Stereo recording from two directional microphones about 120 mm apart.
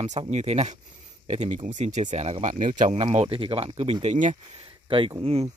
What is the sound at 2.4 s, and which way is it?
Speech, 85° right.